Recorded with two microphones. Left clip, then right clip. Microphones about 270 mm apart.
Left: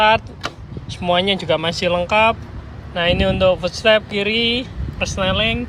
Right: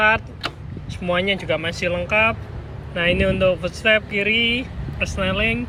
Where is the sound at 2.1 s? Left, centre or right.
Left.